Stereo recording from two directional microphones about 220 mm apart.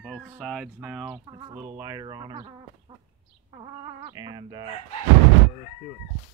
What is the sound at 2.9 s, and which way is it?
Chicken, 20° right (ahead or behind).